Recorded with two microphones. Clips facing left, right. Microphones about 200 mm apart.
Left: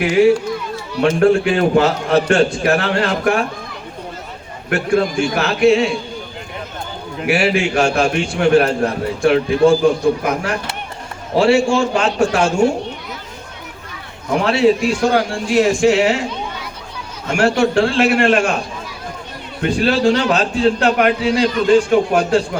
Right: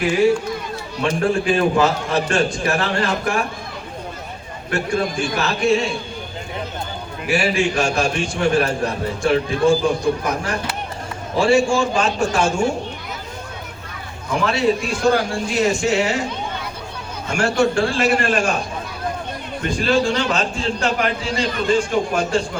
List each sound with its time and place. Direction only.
1.2 s a man's voice: 60° left (ahead or behind)
4.7 s a man's voice: 55° left (ahead or behind)
7.3 s a man's voice: 60° left (ahead or behind)
14.3 s a man's voice: 60° left (ahead or behind)
17.2 s a man's voice: 60° left (ahead or behind)
19.6 s a man's voice: 60° left (ahead or behind)